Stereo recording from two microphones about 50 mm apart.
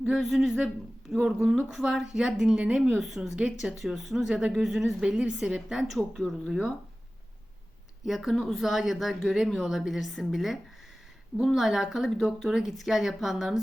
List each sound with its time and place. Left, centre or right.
0.2 s a woman's voice: centre
2.9 s a woman's voice: centre
3.2 s speech: centre
3.8 s speech: centre
6.1 s speech: centre
8.0 s a woman's voice: centre